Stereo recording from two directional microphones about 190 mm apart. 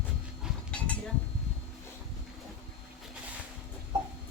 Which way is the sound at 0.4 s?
5° left (ahead or behind).